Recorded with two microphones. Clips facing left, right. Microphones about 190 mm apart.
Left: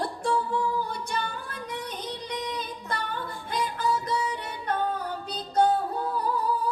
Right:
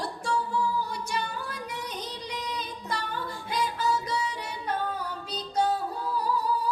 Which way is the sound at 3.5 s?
55° left (ahead or behind).